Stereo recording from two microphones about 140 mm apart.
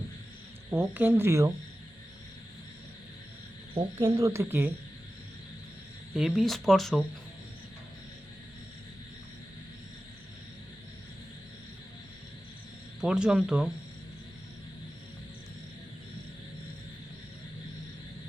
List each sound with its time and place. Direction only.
0.7 s speech: 15° right (ahead or behind)
3.9 s speech: 20° right (ahead or behind)
6.1 s speech: 5° right (ahead or behind)
13.0 s speech: 5° right (ahead or behind)